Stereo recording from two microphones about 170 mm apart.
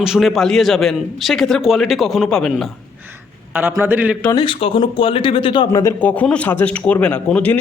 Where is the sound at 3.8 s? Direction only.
10° right (ahead or behind).